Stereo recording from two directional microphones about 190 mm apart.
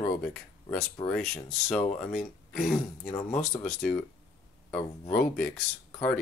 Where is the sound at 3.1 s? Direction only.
10° left (ahead or behind).